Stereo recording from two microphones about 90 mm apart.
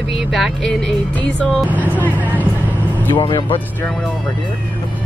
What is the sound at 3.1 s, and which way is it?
Speech, 70° left (ahead or behind).